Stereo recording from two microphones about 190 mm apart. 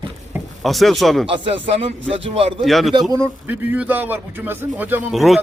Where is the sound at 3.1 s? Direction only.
15° right (ahead or behind).